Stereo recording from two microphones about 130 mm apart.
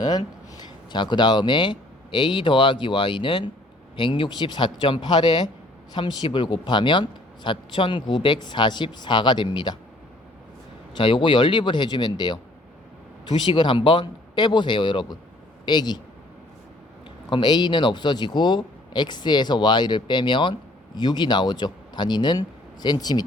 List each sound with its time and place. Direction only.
0.0 s speech: 30° left (ahead or behind)
10.9 s speech: 40° left (ahead or behind)
17.2 s speech: 35° left (ahead or behind)